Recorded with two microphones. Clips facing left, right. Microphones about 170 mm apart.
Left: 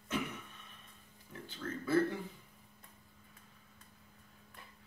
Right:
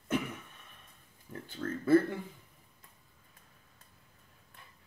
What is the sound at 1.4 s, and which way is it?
Speech, 50° right (ahead or behind).